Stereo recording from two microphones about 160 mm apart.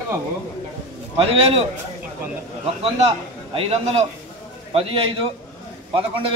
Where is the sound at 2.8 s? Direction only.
35° right (ahead or behind).